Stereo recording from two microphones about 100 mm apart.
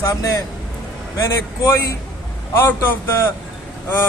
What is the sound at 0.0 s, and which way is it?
Speech, 35° left (ahead or behind).